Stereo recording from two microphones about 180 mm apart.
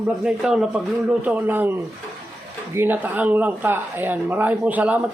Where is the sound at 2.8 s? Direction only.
10° right (ahead or behind).